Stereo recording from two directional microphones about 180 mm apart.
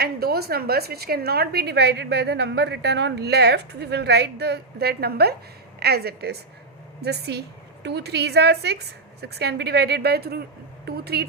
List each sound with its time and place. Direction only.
0.0 s a woman's voice: 60° right (ahead or behind)